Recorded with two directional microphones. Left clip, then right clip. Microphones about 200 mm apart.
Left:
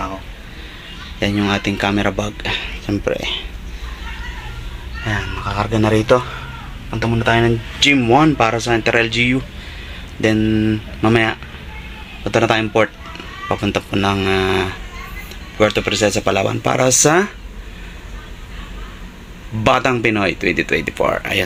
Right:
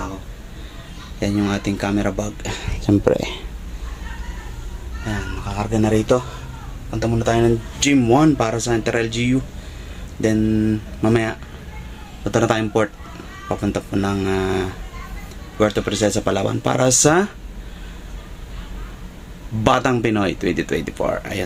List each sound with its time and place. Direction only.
1.2 s speech: 10° right (ahead or behind)
2.6 s speech: 40° right (ahead or behind)
5.0 s speech: 10° right (ahead or behind)
12.2 s speech: 20° right (ahead or behind)
19.6 s speech: 20° right (ahead or behind)